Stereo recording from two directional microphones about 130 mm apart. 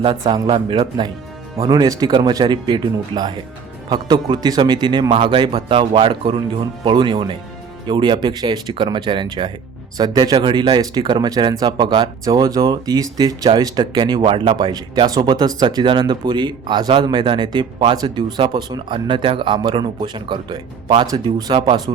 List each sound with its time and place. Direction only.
0.0 s speech: 40° right (ahead or behind)